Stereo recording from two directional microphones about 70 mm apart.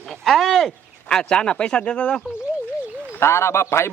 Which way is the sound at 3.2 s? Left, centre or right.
Left.